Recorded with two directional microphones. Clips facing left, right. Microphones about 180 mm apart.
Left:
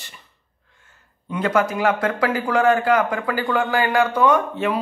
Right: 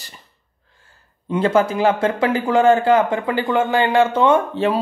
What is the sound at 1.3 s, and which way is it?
A man's voice, 30° right (ahead or behind).